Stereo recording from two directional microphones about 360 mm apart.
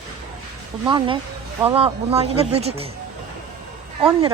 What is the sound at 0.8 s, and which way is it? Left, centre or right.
Speech, centre.